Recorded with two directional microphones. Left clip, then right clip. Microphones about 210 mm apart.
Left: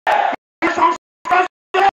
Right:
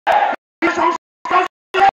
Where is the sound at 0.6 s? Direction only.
15° right (ahead or behind).